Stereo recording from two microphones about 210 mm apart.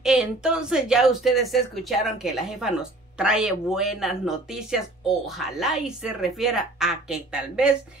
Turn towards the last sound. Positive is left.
turn(degrees=-5)  # may be behind; listen again after turning